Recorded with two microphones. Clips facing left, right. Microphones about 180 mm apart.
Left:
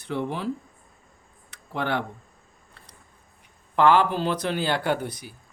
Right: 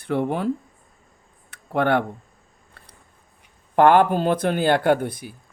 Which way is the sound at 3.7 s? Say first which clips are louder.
Right 4 dB; 50° right (ahead or behind).